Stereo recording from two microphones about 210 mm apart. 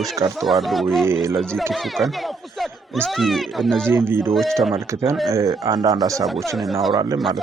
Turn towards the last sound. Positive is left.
turn(degrees=0)  # may be behind; listen again after turning